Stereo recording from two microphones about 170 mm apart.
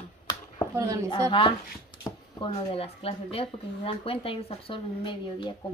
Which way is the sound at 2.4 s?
35° left (ahead or behind).